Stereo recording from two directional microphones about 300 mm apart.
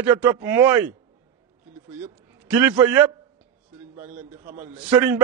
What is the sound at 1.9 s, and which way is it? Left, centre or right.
A man's voice, centre.